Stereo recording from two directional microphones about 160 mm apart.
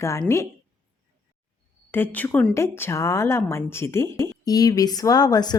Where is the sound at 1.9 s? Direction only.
10° left (ahead or behind).